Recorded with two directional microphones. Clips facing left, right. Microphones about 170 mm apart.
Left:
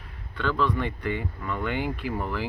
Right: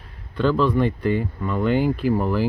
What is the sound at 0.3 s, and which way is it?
Speech, 35° right (ahead or behind).